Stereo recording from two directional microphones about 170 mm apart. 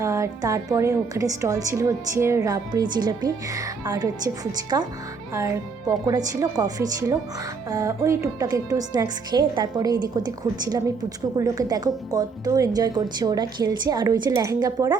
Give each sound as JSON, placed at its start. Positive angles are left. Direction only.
{"t": 0.0, "sound": "a woman's voice", "side_deg": -20}